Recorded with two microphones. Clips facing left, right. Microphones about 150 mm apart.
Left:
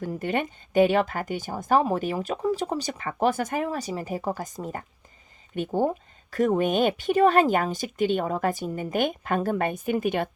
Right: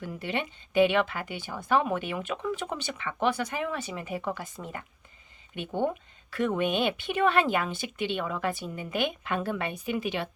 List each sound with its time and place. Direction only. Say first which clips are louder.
0.0 s a woman's voice: left 5 dB; 45° left (ahead or behind)